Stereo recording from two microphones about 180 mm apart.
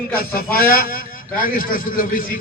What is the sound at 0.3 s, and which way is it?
A man's voice, 55° left (ahead or behind).